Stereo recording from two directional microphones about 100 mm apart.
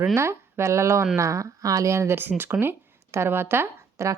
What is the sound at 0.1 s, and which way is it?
Speech, 25° right (ahead or behind).